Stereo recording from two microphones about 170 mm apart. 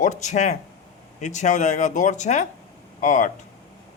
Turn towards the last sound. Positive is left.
turn(degrees=45)  # may be behind; listen again after turning